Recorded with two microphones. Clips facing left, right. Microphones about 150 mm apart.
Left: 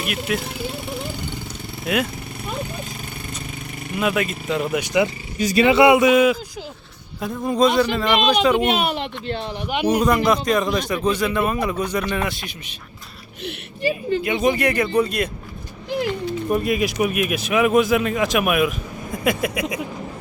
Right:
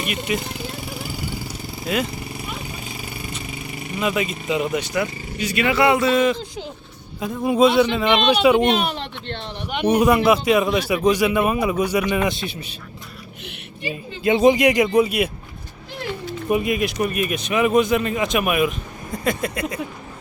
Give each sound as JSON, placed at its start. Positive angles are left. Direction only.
{"t": 0.0, "sound": "speech", "side_deg": 0}
{"t": 3.9, "sound": "speech", "side_deg": 0}
{"t": 5.4, "sound": "speech", "side_deg": 40}
{"t": 5.6, "sound": "speech", "side_deg": 20}
{"t": 7.2, "sound": "speech", "side_deg": -5}
{"t": 8.3, "sound": "speech", "side_deg": -5}
{"t": 8.5, "sound": "speech", "side_deg": 10}
{"t": 10.0, "sound": "speech", "side_deg": -10}
{"t": 13.4, "sound": "a sound", "side_deg": 40}
{"t": 14.2, "sound": "speech", "side_deg": -25}
{"t": 16.5, "sound": "speech", "side_deg": -5}